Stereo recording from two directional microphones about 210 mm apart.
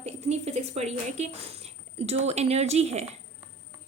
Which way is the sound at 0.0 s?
30° right (ahead or behind).